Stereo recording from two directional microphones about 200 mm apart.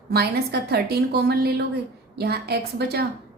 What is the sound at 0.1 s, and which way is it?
A woman's voice, 50° right (ahead or behind).